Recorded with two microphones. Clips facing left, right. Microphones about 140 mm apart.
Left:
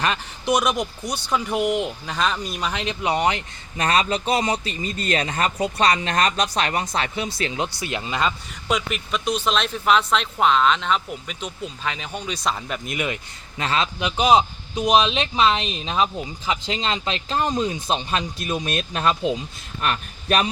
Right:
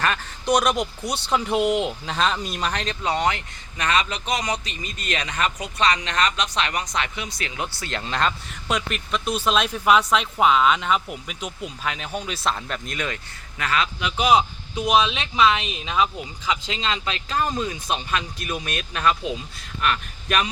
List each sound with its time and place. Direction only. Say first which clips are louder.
0.4 s speech: even; 5° left (ahead or behind)
1.5 s speech: right 1 dB; 25° right (ahead or behind)
2.0 s speech: even; centre (ahead or behind)
2.8 s speech: left 5 dB; 15° left (ahead or behind)
3.2 s speech: left 1 dB; 30° left (ahead or behind)
7.8 s speech: right 3 dB; 15° left (ahead or behind)
13.6 s a man's voice: left 1 dB; 30° left (ahead or behind)